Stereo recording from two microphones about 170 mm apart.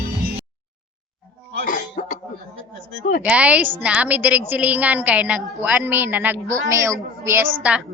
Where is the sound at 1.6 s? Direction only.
50° left (ahead or behind).